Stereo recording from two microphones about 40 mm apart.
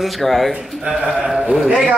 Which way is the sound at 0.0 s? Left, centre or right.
Centre.